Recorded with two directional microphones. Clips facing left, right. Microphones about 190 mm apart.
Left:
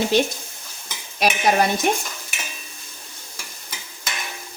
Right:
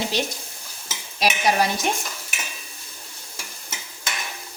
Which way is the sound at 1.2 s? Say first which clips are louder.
Left 2 dB; 55° left (ahead or behind).